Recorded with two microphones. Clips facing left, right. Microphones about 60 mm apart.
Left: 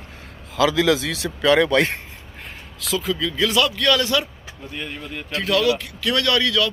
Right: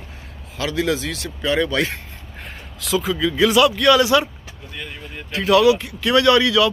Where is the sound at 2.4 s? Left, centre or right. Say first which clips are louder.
Even; centre.